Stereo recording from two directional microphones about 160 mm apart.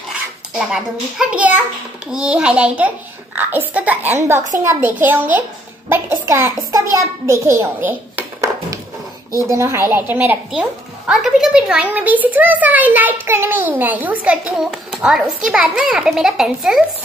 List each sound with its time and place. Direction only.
0.6 s a child's voice: 5° right (ahead or behind)